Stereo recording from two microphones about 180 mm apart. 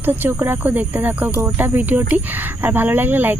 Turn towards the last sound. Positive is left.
turn(degrees=-10)  # may be behind; listen again after turning